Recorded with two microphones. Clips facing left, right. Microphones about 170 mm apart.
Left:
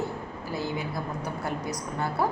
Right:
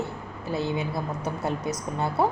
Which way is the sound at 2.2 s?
25° right (ahead or behind).